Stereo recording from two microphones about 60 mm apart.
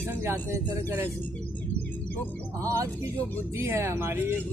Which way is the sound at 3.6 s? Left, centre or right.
Right.